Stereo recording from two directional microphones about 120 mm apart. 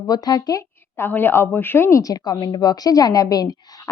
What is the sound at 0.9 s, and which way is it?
A woman's voice, 20° left (ahead or behind).